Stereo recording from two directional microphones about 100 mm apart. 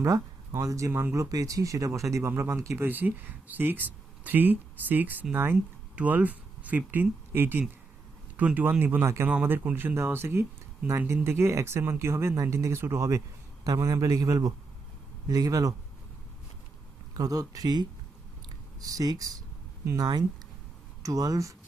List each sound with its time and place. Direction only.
0.0 s a man's voice: 30° right (ahead or behind)
17.2 s a man's voice: 35° right (ahead or behind)
18.4 s a sound: 35° right (ahead or behind)
20.0 s a man's voice: 45° right (ahead or behind)